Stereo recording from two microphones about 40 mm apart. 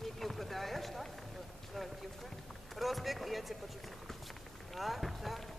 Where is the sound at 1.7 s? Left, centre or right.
Centre.